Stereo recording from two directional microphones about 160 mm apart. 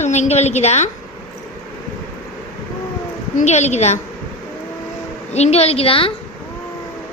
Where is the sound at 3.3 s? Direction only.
45° left (ahead or behind).